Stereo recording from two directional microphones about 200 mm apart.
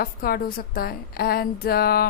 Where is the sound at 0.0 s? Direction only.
50° left (ahead or behind).